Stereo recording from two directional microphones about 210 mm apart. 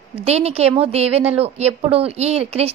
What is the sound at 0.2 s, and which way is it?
A woman's voice, 30° right (ahead or behind).